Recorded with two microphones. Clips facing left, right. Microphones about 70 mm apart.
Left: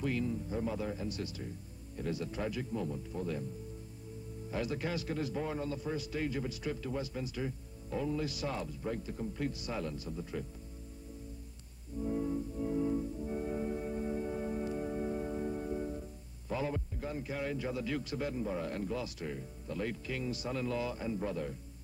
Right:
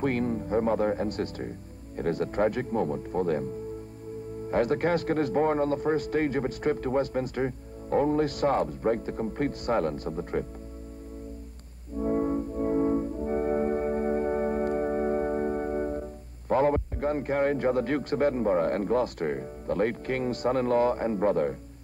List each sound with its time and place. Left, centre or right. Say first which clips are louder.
0.0 s a man's voice: right 8 dB; right
4.5 s a man's voice: right 12 dB; right
12.0 s music: right 8 dB; right